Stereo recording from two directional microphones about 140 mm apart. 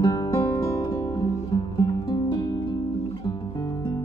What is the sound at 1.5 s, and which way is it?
Music, 35° left (ahead or behind).